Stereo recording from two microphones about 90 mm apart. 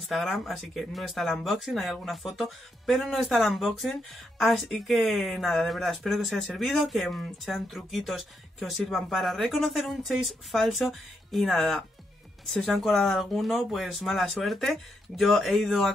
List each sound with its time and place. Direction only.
0.0 s speech: centre (ahead or behind)